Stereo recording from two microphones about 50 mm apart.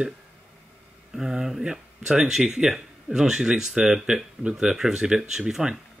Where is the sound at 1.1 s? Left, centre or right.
Centre.